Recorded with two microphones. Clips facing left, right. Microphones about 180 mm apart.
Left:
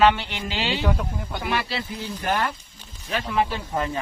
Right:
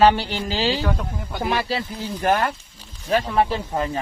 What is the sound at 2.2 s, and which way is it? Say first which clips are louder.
Speech: right 5 dB; 50° right (ahead or behind).